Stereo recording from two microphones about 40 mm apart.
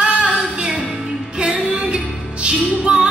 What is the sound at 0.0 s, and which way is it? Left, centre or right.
Music, right.